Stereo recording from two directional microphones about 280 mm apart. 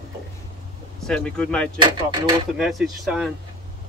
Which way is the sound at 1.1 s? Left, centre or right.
Centre.